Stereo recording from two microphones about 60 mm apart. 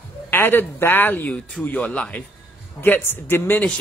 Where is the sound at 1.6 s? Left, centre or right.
Left.